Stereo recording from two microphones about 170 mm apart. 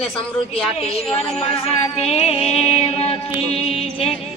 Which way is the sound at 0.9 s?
35° left (ahead or behind).